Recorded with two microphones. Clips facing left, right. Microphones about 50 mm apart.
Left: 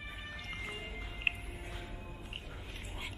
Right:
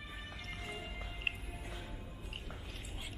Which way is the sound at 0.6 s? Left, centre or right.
Left.